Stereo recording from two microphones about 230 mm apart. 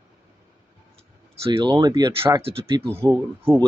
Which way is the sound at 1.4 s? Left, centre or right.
Centre.